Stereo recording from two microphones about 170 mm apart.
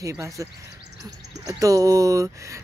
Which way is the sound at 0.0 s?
20° right (ahead or behind).